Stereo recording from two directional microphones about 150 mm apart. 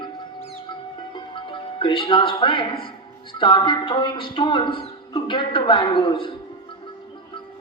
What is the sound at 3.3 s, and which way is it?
A man's voice, 35° left (ahead or behind).